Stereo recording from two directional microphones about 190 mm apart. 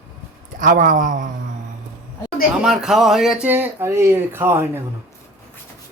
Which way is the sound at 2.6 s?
Centre (ahead or behind).